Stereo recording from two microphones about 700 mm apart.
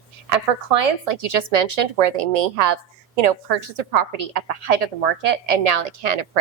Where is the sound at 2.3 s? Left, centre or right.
Right.